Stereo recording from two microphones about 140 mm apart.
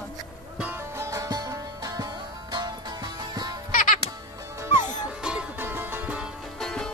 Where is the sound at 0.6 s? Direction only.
15° right (ahead or behind).